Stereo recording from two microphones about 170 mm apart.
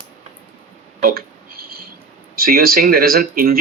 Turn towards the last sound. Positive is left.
turn(degrees=-60)  # may be behind; listen again after turning